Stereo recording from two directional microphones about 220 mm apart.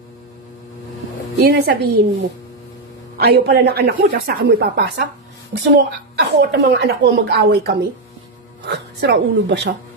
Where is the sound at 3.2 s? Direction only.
45° right (ahead or behind).